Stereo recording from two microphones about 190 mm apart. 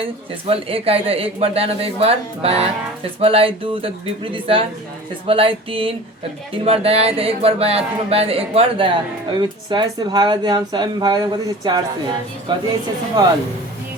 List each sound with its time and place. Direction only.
0.0 s speech: 30° right (ahead or behind)